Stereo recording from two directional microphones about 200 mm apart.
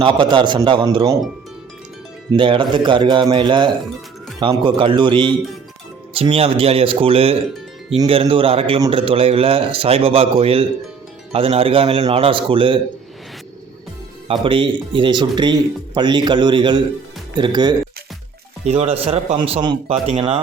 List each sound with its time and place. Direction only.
0.0 s speech: 25° right (ahead or behind)
2.3 s speech: 25° right (ahead or behind)
14.4 s speech: 25° right (ahead or behind)
18.6 s speech: 30° right (ahead or behind)